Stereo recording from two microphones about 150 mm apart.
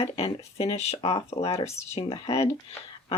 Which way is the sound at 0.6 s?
40° left (ahead or behind).